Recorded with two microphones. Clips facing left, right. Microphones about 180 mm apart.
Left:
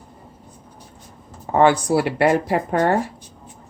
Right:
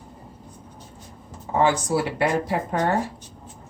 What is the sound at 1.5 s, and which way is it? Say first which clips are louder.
Speech: left 5 dB; 60° left (ahead or behind).